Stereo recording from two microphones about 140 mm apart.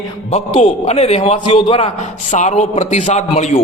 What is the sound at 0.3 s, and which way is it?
A man's voice, 45° left (ahead or behind).